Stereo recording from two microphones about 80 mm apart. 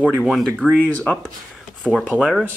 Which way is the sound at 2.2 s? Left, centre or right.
Centre.